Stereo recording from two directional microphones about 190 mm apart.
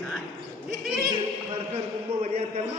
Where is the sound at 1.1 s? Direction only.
30° right (ahead or behind).